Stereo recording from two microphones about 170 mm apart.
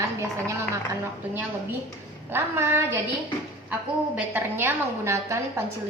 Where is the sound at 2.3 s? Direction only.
15° right (ahead or behind).